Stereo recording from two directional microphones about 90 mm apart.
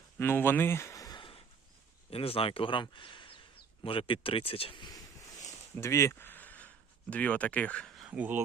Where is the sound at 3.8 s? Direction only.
90° left.